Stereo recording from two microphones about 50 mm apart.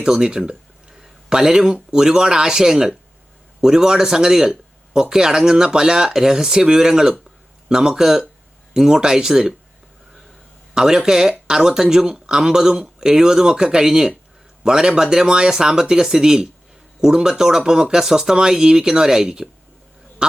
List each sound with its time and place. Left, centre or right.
0.0 s speech: centre
10.8 s speech: centre